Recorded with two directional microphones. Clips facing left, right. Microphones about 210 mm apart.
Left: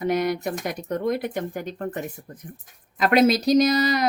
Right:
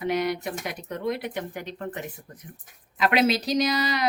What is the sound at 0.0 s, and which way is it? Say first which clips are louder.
Speech: left 3 dB; 45° left (ahead or behind).